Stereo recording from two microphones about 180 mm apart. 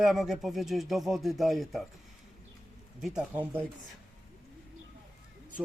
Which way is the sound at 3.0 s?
5° right (ahead or behind).